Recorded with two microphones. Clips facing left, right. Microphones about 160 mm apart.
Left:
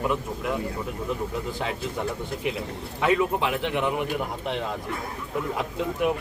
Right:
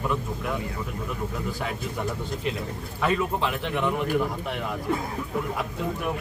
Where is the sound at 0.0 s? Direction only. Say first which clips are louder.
Left 2 dB; 15° left (ahead or behind).